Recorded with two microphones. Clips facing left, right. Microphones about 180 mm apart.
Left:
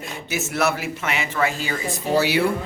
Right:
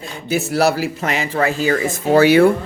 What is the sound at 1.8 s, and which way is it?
Speech, 50° right (ahead or behind).